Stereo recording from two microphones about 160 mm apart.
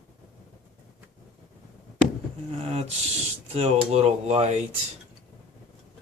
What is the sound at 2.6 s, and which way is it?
Speech, 40° right (ahead or behind).